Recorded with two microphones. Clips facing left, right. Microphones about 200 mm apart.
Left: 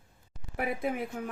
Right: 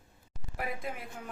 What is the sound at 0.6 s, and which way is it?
Speech, 60° left (ahead or behind).